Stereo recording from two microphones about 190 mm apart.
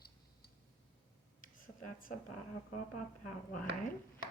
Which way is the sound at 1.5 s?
45° left (ahead or behind).